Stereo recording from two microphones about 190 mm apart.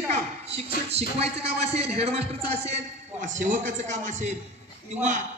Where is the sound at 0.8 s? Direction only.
35° right (ahead or behind).